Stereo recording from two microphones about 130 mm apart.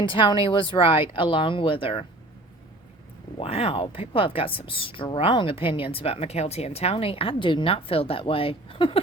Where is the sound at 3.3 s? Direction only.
50° left (ahead or behind).